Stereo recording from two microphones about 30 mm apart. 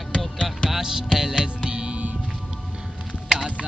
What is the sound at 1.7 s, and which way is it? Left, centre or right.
Music, right.